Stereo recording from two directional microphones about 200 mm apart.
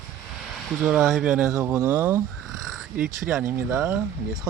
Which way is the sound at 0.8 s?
Centre (ahead or behind).